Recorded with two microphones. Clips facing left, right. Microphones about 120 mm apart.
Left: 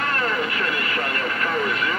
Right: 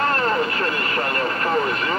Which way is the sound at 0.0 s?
35° right (ahead or behind).